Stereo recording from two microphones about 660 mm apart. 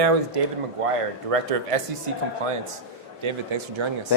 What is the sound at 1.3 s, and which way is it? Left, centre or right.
Speech, right.